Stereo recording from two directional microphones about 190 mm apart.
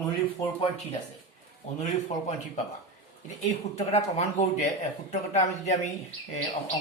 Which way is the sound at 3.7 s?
35° left (ahead or behind).